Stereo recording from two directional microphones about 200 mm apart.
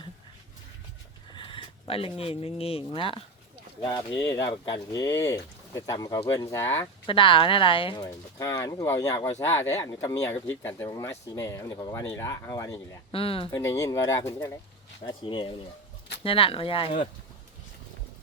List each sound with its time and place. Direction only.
1.3 s speech: 25° left (ahead or behind)
7.0 s speech: 25° left (ahead or behind)
8.0 s speech: 15° left (ahead or behind)
13.1 s speech: 30° left (ahead or behind)
13.6 s speech: 15° left (ahead or behind)
15.0 s speech: 25° left (ahead or behind)